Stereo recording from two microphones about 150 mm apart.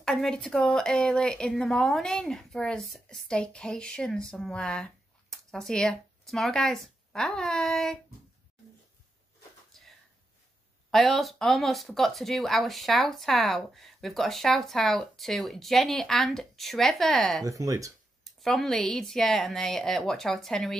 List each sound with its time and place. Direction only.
0.0 s speech: centre (ahead or behind)
9.7 s a sound: centre (ahead or behind)
10.9 s speech: centre (ahead or behind)
17.5 s speech: 20° right (ahead or behind)
18.4 s speech: centre (ahead or behind)